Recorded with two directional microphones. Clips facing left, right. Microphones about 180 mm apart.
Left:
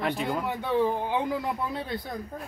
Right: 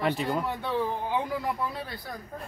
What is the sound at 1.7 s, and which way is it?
Speech, 20° left (ahead or behind).